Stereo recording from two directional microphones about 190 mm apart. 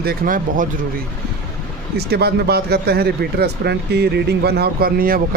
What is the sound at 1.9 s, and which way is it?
Speech, 55° right (ahead or behind).